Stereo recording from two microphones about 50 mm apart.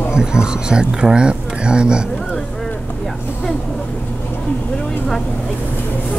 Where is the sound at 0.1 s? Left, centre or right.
Centre.